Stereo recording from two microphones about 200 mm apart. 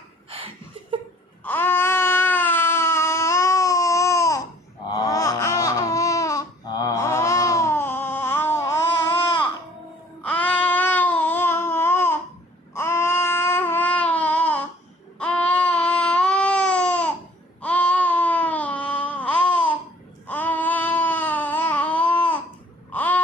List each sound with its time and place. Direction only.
0.3 s a sound: 30° right (ahead or behind)
1.5 s baby cry: 10° left (ahead or behind)
4.9 s laughter: 15° left (ahead or behind)
9.1 s babbling: 25° left (ahead or behind)
10.2 s babbling: 5° left (ahead or behind)
15.2 s baby cry: 5° left (ahead or behind)
17.6 s a sound: 5° left (ahead or behind)
20.2 s babbling: 10° left (ahead or behind)
22.9 s a sound: 10° left (ahead or behind)